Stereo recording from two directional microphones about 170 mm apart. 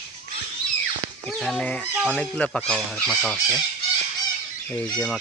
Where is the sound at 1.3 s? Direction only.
Centre (ahead or behind).